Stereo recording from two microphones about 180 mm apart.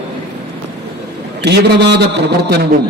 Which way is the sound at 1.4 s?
70° right (ahead or behind).